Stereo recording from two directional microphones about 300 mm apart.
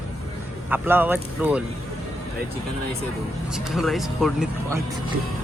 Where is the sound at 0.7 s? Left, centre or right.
Centre.